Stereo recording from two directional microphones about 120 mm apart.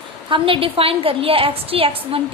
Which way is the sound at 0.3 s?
45° right (ahead or behind).